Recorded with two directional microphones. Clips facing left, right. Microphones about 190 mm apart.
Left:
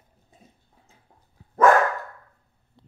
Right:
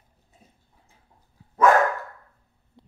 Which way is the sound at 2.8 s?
15° right (ahead or behind).